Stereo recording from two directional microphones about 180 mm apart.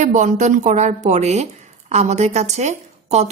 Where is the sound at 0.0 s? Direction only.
45° right (ahead or behind).